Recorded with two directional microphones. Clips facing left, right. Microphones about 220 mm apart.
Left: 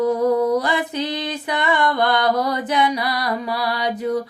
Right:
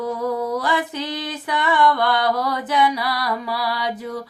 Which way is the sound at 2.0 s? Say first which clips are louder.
Left 2 dB; 20° left (ahead or behind).